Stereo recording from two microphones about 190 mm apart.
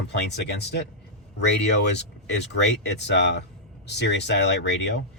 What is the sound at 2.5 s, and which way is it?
Speech, 65° left (ahead or behind).